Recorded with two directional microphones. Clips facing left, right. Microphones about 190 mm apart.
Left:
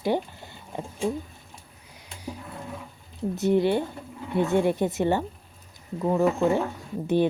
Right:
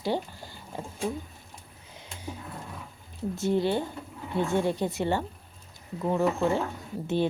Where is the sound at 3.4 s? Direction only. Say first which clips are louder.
Left 4 dB; 20° left (ahead or behind).